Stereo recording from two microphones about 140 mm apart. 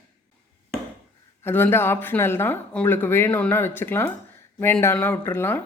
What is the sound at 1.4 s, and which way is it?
Speech, 15° left (ahead or behind).